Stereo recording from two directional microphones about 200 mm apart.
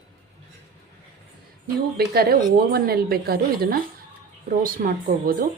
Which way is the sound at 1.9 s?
50° right (ahead or behind).